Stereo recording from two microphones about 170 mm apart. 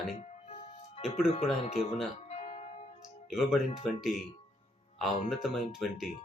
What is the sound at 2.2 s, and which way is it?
Music, 40° left (ahead or behind).